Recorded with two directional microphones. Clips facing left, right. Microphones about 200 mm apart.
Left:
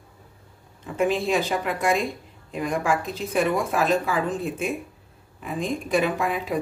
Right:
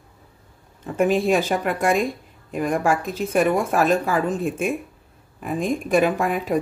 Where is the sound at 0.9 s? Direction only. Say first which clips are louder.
Right 4 dB; 45° right (ahead or behind).